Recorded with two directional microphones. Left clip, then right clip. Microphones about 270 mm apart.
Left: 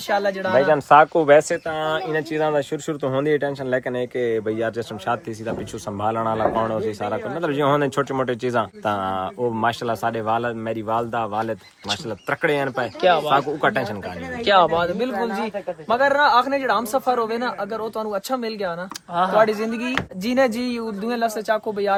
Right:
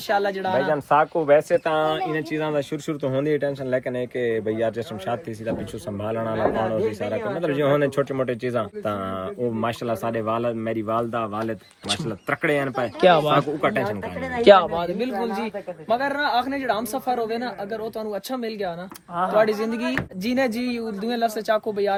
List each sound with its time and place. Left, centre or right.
0.1 s speech: centre
0.7 s speech: left
1.7 s speech: centre
12.3 s speech: centre
13.0 s speech: right
13.6 s speech: centre
14.5 s speech: centre
15.1 s speech: left
15.9 s speech: centre